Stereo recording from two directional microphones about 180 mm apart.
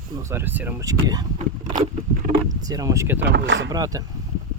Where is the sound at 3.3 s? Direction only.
85° right.